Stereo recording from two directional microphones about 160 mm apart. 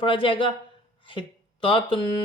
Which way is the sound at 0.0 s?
30° left (ahead or behind).